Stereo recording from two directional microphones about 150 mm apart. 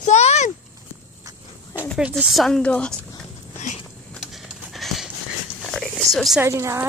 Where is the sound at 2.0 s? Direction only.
5° right (ahead or behind).